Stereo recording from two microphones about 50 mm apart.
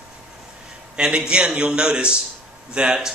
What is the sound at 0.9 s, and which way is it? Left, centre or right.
Speech, centre.